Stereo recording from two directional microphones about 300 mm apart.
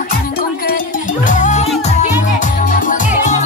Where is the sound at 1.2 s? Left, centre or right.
Left.